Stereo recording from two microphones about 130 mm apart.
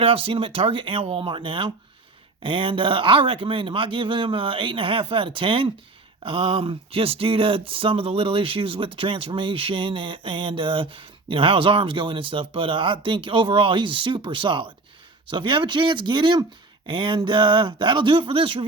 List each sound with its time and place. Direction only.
0.0 s speech: 45° right (ahead or behind)